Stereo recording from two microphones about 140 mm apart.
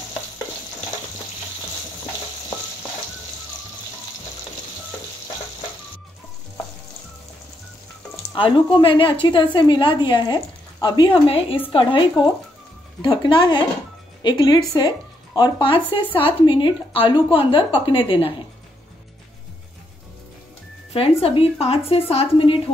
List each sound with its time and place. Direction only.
8.4 s a woman's voice: 40° left (ahead or behind)
13.1 s a woman's voice: 35° left (ahead or behind)
20.9 s a woman's voice: 45° left (ahead or behind)